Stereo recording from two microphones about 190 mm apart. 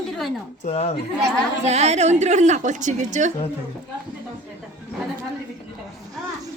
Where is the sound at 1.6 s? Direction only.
35° right (ahead or behind).